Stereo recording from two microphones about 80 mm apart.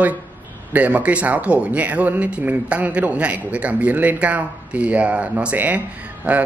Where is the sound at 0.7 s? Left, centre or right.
Centre.